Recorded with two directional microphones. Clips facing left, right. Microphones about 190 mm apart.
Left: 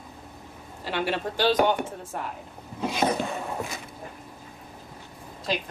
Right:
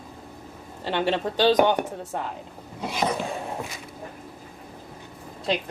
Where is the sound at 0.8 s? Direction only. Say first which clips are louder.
Right 3 dB; 20° right (ahead or behind).